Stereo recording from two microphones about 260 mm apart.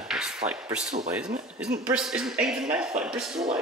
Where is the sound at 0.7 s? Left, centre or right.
Centre.